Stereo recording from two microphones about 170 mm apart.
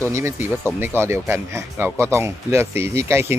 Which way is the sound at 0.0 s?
15° right (ahead or behind).